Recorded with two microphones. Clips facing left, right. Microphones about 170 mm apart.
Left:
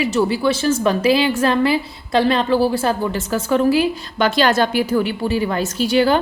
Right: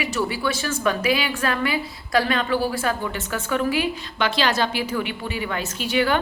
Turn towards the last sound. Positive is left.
turn(degrees=35)  # may be behind; listen again after turning